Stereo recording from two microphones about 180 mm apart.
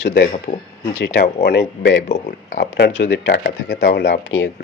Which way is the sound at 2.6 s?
75° left (ahead or behind).